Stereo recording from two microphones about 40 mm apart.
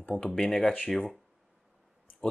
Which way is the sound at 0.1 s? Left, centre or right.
Centre.